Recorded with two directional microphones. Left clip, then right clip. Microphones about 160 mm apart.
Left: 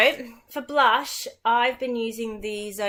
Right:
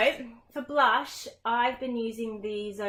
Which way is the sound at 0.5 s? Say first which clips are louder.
Left 4 dB; 15° left (ahead or behind).